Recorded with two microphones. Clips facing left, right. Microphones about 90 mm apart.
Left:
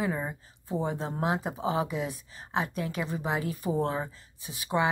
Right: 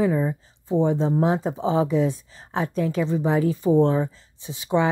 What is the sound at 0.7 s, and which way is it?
Speech, 20° right (ahead or behind).